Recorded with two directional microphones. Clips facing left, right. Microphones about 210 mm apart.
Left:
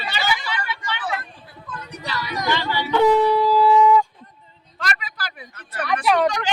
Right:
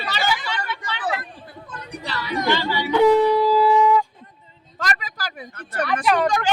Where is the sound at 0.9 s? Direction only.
35° right (ahead or behind).